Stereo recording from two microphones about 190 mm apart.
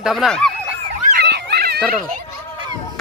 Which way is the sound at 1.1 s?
60° right (ahead or behind).